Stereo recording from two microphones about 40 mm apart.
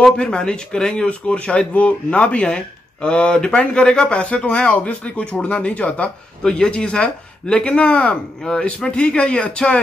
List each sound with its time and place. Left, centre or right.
0.2 s speech: left